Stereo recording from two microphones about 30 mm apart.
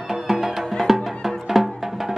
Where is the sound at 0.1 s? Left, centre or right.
Centre.